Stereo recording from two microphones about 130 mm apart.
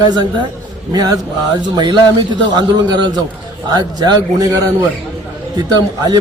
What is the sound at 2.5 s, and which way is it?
A man's voice, 35° right (ahead or behind).